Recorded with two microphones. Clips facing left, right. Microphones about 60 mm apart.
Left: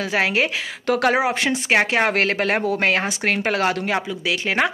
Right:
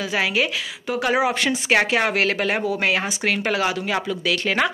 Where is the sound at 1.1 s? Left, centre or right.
Left.